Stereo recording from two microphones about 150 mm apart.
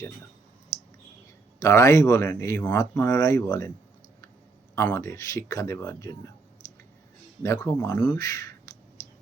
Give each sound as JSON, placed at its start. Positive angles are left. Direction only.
{"t": 1.5, "sound": "speech", "side_deg": 20}
{"t": 4.7, "sound": "speech", "side_deg": 20}
{"t": 7.4, "sound": "speech", "side_deg": 20}